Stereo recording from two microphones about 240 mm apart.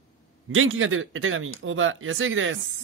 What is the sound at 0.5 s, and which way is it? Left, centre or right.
Speech, right.